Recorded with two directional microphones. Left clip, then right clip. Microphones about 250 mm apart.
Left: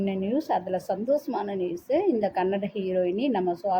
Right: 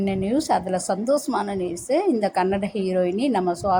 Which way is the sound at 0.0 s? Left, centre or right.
Centre.